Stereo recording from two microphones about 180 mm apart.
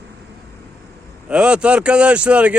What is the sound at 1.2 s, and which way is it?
Speech, 5° right (ahead or behind).